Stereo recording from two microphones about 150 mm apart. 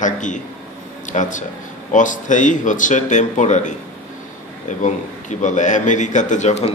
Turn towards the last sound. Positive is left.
turn(degrees=50)  # may be behind; listen again after turning